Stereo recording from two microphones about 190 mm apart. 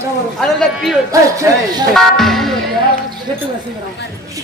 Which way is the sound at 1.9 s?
Centre (ahead or behind).